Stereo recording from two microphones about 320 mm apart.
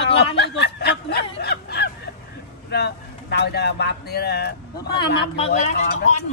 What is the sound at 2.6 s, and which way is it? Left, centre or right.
A man's voice, left.